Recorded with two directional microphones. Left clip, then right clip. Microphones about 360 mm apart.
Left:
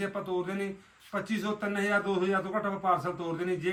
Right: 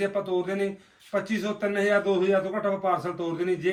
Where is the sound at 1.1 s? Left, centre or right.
Centre.